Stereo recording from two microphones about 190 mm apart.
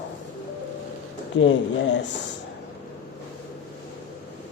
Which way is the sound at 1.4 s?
80° left.